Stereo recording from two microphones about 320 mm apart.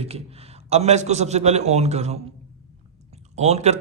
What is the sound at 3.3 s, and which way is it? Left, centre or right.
Speech, right.